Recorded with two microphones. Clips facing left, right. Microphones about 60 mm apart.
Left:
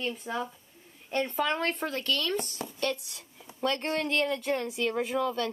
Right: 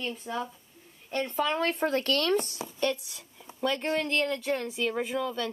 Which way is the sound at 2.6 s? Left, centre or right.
Centre.